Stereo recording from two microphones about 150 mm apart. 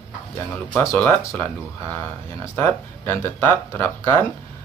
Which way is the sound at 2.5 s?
15° left (ahead or behind).